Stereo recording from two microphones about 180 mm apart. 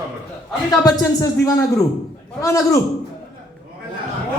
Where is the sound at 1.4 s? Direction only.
15° left (ahead or behind).